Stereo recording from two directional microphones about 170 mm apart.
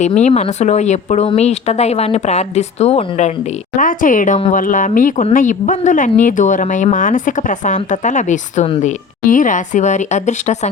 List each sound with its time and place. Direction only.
0.0 s speech: 45° left (ahead or behind)